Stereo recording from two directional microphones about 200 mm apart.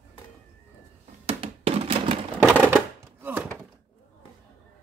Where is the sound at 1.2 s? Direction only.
30° right (ahead or behind).